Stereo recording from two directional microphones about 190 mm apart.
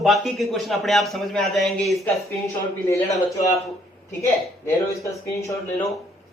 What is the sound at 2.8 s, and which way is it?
Speech, 15° left (ahead or behind).